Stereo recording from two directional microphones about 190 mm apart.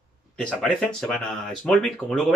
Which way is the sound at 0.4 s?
5° left (ahead or behind).